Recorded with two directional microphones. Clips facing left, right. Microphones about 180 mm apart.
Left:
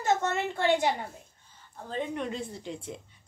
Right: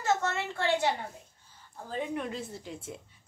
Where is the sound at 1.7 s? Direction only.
5° right (ahead or behind).